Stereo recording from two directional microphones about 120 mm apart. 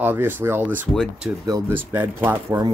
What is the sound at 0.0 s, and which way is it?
Speech, 15° right (ahead or behind).